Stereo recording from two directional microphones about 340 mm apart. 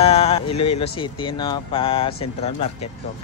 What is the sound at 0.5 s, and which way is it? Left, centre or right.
Speech, left.